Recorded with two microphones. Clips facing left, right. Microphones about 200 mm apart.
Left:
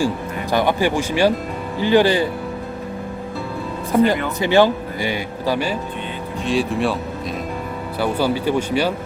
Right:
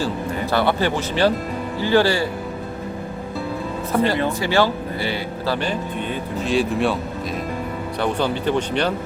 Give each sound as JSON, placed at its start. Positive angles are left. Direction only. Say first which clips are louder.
{"t": 0.5, "sound": "speech", "louder": "left 2 dB", "side_deg": 15}
{"t": 3.9, "sound": "speech", "louder": "left 3 dB", "side_deg": 15}
{"t": 6.4, "sound": "speech", "louder": "even", "side_deg": 0}
{"t": 7.9, "sound": "speech", "louder": "left 2 dB", "side_deg": 5}